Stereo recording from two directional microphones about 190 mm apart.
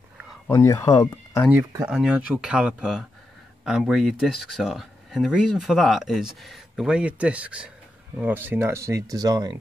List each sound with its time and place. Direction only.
0.5 s speech: 15° left (ahead or behind)
1.9 s speech: 5° right (ahead or behind)